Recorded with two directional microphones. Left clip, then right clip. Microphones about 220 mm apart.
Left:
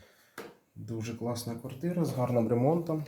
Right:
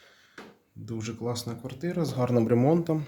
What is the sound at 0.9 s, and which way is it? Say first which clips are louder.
Speech: right 3 dB; 20° right (ahead or behind).